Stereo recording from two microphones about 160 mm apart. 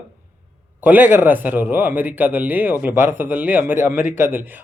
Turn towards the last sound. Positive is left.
turn(degrees=-10)  # may be behind; listen again after turning